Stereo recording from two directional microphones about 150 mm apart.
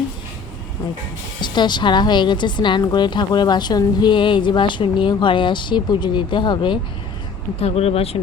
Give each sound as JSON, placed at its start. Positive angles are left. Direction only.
{"t": 1.4, "sound": "a woman's voice", "side_deg": 30}